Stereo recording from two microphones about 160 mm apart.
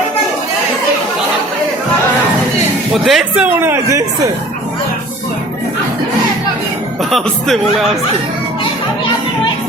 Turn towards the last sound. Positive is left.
turn(degrees=0)  # may be behind; listen again after turning